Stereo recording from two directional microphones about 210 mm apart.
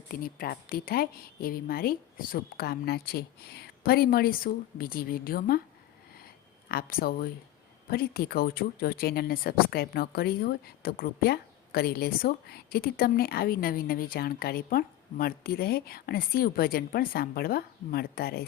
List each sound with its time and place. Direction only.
0.1 s speech: 45° left (ahead or behind)
6.7 s speech: 45° left (ahead or behind)